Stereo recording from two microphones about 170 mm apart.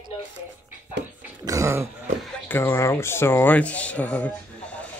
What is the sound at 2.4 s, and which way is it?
Speech, 15° left (ahead or behind).